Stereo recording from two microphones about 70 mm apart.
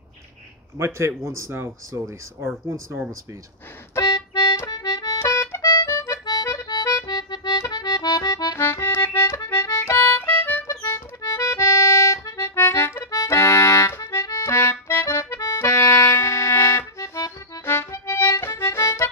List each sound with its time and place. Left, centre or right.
0.7 s a man's voice: right
4.6 s accordion: left
5.2 s accordion: left
6.2 s accordion: left
8.5 s music: left
10.8 s accordion: left
13.1 s accordion: left
17.7 s harmonica: left